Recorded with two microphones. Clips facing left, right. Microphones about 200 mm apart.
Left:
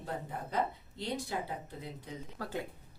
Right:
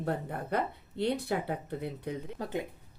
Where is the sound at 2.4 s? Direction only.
20° right (ahead or behind).